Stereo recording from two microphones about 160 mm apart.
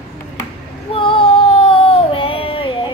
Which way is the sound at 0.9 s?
35° left (ahead or behind).